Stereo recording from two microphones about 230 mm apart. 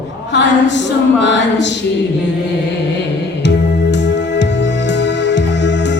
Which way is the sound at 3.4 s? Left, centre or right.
Left.